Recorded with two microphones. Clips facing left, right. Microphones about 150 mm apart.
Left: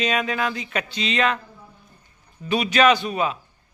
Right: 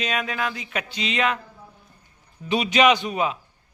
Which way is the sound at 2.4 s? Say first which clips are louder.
Left 1 dB; 20° right (ahead or behind).